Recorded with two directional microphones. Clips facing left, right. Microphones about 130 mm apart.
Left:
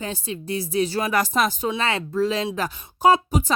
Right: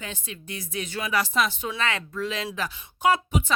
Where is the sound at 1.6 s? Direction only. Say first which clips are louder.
Left 5 dB; 30° left (ahead or behind).